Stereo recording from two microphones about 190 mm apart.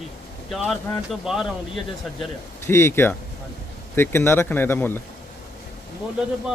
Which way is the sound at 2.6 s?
15° left (ahead or behind).